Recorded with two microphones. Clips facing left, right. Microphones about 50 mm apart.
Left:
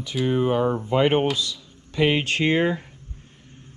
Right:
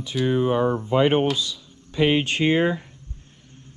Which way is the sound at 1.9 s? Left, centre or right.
Left.